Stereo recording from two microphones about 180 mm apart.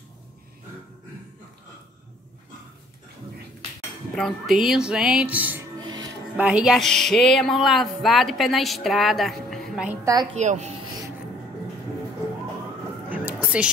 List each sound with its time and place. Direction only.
4.1 s speech: centre (ahead or behind)
5.8 s music: 25° right (ahead or behind)
6.3 s speech: 5° right (ahead or behind)
10.3 s a woman's voice: 40° right (ahead or behind)
13.1 s music: 10° right (ahead or behind)